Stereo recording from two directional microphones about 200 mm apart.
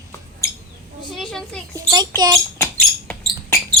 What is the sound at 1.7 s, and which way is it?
Speech, 20° right (ahead or behind).